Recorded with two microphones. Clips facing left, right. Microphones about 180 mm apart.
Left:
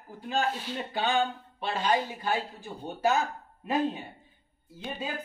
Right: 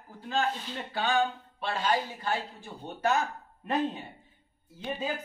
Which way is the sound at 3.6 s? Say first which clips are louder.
Left 1 dB; 10° left (ahead or behind).